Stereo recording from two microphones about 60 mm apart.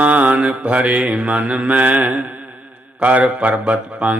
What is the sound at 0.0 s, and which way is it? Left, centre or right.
Mantra, right.